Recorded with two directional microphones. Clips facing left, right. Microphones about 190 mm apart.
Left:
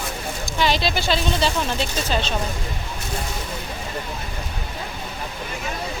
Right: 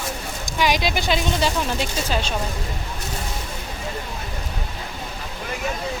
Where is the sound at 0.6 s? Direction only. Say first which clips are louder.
Even; 15° right (ahead or behind).